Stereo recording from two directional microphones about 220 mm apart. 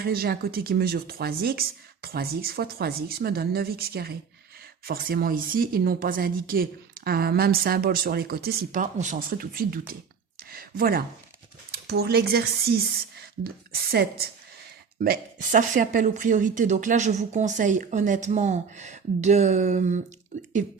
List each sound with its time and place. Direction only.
0.0 s speech: 45° right (ahead or behind)